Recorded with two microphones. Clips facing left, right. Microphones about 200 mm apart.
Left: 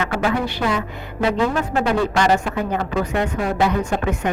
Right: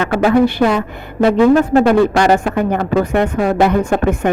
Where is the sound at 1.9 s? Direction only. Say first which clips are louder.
Right 6 dB; 55° right (ahead or behind).